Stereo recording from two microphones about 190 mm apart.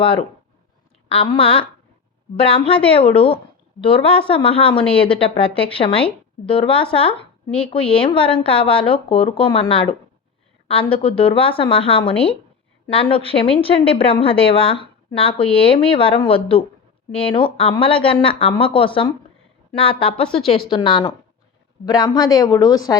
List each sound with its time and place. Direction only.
0.0 s a woman's voice: 30° left (ahead or behind)
7.4 s speech: 5° left (ahead or behind)
7.7 s a woman's voice: 30° left (ahead or behind)